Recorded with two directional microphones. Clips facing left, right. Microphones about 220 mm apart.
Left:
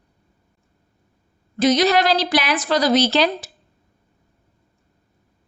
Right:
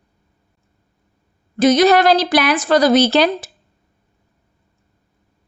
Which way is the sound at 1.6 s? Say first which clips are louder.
Right 5 dB; 50° right (ahead or behind).